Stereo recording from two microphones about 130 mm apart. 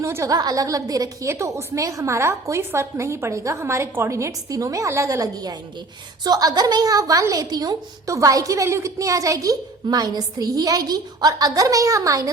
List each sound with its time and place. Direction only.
0.0 s a woman's voice: 20° right (ahead or behind)